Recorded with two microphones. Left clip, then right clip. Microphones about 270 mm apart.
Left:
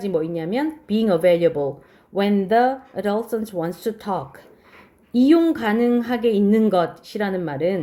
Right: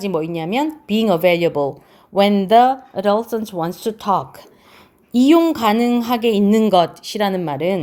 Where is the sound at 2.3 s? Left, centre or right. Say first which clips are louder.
Right 5 dB; right.